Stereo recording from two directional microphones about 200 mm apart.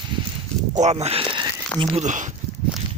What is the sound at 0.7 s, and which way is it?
Speech, 35° right (ahead or behind).